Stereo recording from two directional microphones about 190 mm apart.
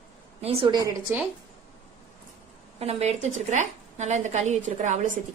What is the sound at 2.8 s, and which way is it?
A woman's voice, 35° right (ahead or behind).